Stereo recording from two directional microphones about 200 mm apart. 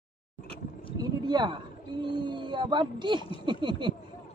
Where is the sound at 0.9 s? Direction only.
20° right (ahead or behind).